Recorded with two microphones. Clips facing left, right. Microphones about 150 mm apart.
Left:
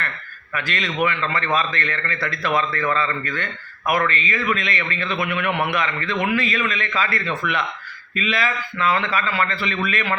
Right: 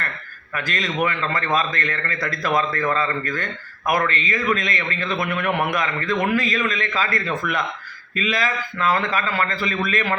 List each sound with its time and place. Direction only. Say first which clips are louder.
0.5 s a man's voice: even; 40° right (ahead or behind)